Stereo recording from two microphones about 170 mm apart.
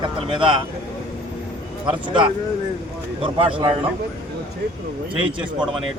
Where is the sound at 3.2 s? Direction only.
30° right (ahead or behind).